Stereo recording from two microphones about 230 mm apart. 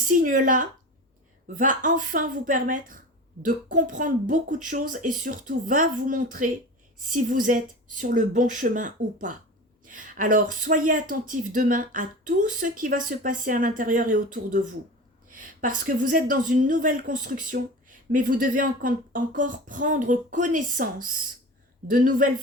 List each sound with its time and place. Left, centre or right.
0.1 s a woman's voice: right